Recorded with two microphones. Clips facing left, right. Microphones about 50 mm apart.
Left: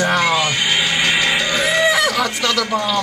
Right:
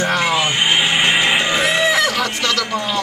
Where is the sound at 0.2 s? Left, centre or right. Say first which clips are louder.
Even; right.